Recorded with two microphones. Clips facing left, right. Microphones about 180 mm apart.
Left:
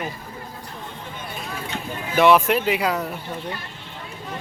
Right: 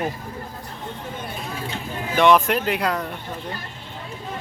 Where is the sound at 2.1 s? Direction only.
5° left (ahead or behind).